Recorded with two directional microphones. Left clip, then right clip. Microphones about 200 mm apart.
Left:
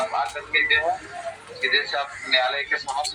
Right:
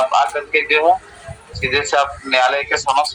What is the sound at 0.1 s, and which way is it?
A man's voice, 40° right (ahead or behind).